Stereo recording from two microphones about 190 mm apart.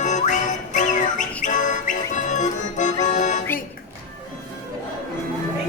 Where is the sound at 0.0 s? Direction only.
40° left (ahead or behind).